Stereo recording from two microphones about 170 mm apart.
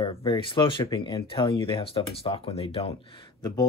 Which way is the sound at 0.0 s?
30° left (ahead or behind).